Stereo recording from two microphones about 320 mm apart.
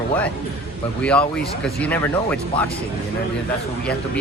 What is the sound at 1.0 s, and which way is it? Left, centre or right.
Speech, centre.